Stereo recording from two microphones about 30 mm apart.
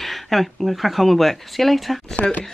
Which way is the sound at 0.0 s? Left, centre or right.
Centre.